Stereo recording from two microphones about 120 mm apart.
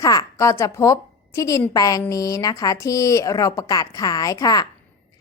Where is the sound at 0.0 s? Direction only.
30° left (ahead or behind).